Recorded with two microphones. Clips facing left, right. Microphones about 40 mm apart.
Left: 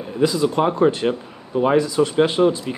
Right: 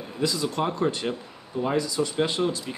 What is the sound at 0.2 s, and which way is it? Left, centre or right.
Speech, left.